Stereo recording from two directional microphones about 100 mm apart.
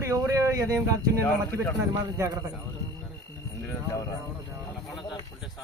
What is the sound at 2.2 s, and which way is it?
Speech, 30° right (ahead or behind).